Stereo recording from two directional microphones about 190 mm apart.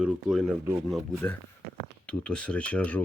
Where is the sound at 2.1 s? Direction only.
5° left (ahead or behind).